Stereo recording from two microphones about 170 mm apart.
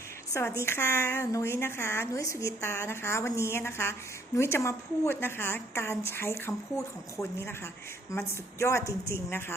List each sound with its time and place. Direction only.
0.3 s a woman's voice: 15° left (ahead or behind)